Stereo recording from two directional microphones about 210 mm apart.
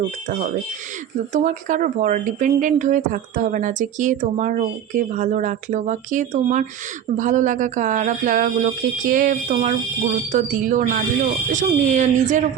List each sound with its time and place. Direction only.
0.3 s speech: 35° right (ahead or behind)